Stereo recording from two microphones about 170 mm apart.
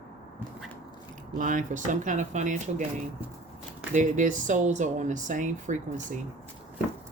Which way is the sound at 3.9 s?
50° right (ahead or behind).